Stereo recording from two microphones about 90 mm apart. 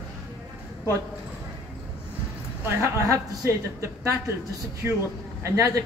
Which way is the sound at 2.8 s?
35° right (ahead or behind).